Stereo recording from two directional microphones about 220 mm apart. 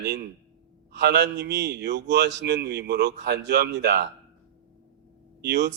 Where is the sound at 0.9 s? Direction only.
50° right (ahead or behind).